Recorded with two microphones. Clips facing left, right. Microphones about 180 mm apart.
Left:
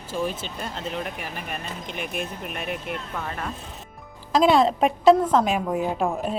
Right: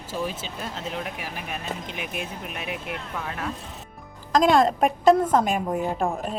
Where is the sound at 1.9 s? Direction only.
45° left (ahead or behind).